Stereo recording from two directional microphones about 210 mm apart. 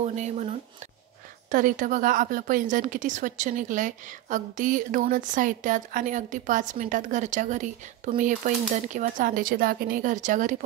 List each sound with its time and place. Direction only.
0.0 s a woman's voice: 35° right (ahead or behind)